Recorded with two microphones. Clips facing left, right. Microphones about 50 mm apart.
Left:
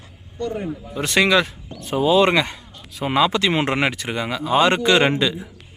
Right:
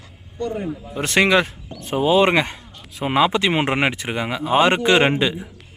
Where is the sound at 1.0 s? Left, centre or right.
Right.